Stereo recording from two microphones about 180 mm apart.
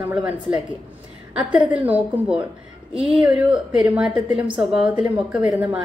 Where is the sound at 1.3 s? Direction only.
5° right (ahead or behind).